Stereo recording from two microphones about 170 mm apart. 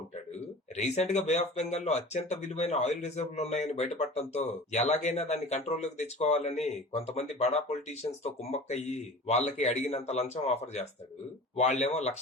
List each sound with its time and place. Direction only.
0.3 s speech: 40° left (ahead or behind)